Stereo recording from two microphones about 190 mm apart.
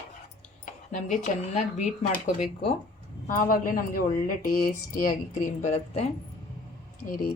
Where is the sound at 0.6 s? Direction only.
40° left (ahead or behind).